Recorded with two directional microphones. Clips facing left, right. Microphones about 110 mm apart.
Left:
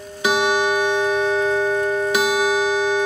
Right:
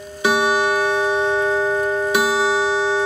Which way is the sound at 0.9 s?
25° right (ahead or behind).